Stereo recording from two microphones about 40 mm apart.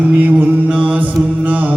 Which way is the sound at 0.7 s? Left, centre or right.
Right.